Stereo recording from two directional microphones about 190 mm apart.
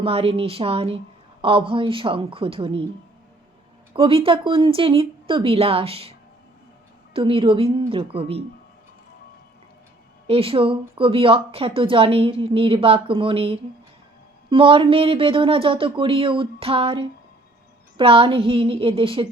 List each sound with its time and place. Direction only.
0.0 s speech: 30° right (ahead or behind)
3.9 s speech: 30° right (ahead or behind)
10.2 s speech: 30° right (ahead or behind)